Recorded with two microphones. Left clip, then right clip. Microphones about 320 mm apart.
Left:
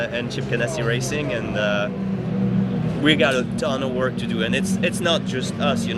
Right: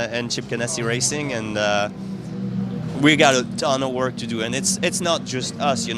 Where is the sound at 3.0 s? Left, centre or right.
Right.